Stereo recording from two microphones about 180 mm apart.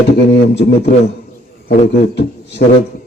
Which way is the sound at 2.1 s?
70° left (ahead or behind).